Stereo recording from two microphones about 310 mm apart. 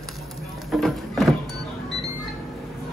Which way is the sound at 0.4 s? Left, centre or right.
Centre.